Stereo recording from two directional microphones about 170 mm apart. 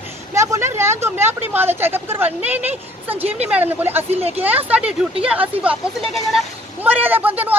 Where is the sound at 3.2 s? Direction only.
35° right (ahead or behind).